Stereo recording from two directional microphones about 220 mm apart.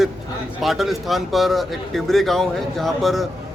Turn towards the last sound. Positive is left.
turn(degrees=0)  # may be behind; listen again after turning